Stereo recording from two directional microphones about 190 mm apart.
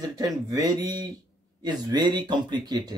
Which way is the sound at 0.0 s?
20° right (ahead or behind).